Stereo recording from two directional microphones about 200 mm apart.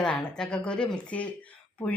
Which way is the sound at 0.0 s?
5° left (ahead or behind).